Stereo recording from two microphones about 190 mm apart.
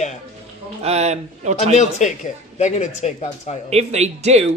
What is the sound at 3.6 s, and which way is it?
Speech, 35° right (ahead or behind).